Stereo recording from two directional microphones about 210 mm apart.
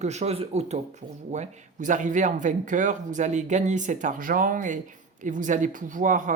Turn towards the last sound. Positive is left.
turn(degrees=-35)  # may be behind; listen again after turning